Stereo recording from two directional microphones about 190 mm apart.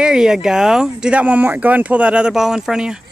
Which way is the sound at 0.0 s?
5° right (ahead or behind).